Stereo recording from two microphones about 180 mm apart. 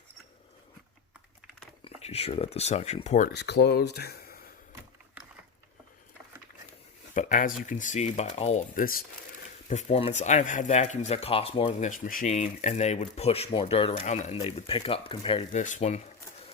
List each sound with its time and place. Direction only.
1.8 s speech: 35° left (ahead or behind)
3.3 s speech: 70° left (ahead or behind)
7.1 s speech: 45° left (ahead or behind)
9.6 s speech: 40° left (ahead or behind)
11.9 s speech: 50° left (ahead or behind); by 15.4 s 30° left (ahead or behind)
15.5 s speech: 40° left (ahead or behind)